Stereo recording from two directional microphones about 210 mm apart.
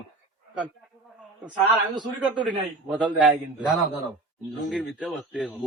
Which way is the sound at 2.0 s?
20° right (ahead or behind).